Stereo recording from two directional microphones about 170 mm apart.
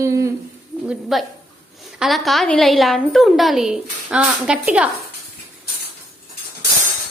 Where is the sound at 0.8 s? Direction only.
Centre (ahead or behind).